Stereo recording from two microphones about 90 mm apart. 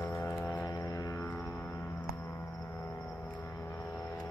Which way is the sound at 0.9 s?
40° left (ahead or behind).